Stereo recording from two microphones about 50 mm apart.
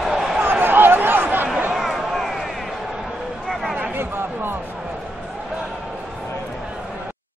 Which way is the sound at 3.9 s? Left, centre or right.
Right.